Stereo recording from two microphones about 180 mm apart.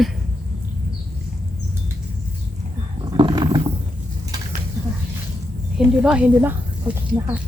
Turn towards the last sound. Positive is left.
turn(degrees=-10)  # may be behind; listen again after turning